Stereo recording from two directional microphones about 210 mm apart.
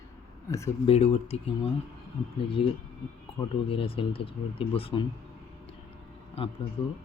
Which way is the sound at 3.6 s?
25° left (ahead or behind).